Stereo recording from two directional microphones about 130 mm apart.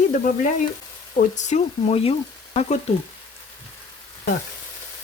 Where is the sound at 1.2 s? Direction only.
65° left (ahead or behind); by 2.1 s 50° left (ahead or behind).